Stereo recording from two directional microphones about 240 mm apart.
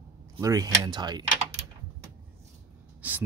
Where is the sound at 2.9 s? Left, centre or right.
Centre.